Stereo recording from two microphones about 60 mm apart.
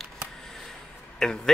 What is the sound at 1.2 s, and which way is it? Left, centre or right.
Speech, centre.